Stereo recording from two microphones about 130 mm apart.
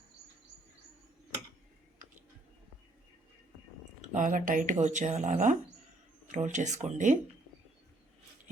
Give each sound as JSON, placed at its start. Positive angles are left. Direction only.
{"t": 4.0, "sound": "speech", "side_deg": -75}